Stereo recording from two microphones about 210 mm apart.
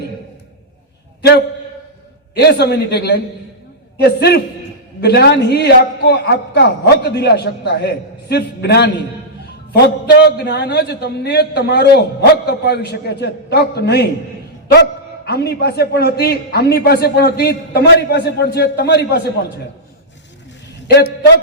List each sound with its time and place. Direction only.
2.3 s a man's voice: 50° left (ahead or behind)
10.2 s a man's voice: 50° left (ahead or behind)
20.8 s a man's voice: 50° left (ahead or behind)